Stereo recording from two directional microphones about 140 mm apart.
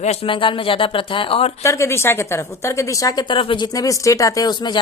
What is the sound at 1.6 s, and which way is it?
A woman's voice, 20° left (ahead or behind).